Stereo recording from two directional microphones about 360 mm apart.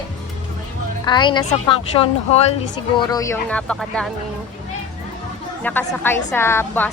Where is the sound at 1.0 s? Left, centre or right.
Centre.